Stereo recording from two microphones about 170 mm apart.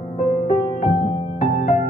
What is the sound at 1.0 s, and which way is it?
Music, 35° left (ahead or behind).